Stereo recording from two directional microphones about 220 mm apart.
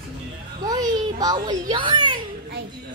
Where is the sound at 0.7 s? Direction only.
15° right (ahead or behind).